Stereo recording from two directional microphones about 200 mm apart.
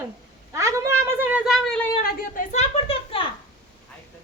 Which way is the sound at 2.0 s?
40° left (ahead or behind).